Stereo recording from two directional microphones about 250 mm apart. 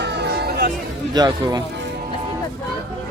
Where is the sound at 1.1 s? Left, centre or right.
Centre.